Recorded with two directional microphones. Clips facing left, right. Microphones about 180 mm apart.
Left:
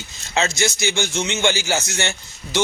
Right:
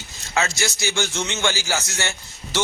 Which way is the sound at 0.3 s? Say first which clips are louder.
Left 3 dB; 20° left (ahead or behind).